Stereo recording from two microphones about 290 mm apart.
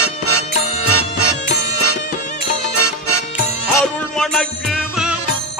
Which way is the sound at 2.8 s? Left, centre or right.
Left.